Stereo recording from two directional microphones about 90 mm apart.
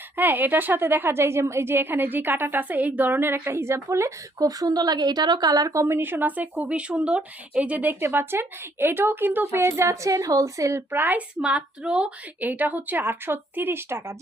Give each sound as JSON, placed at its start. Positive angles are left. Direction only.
{"t": 0.2, "sound": "speech", "side_deg": -20}
{"t": 4.4, "sound": "speech", "side_deg": -45}
{"t": 11.3, "sound": "speech", "side_deg": -10}